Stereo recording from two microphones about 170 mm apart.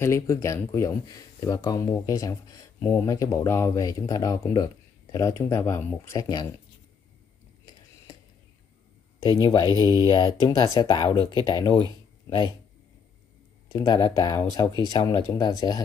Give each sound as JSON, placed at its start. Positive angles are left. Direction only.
{"t": 0.0, "sound": "speech", "side_deg": 15}
{"t": 9.4, "sound": "speech", "side_deg": 25}
{"t": 13.7, "sound": "speech", "side_deg": 25}